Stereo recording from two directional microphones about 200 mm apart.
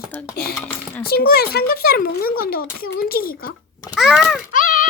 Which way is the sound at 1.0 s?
50° left (ahead or behind).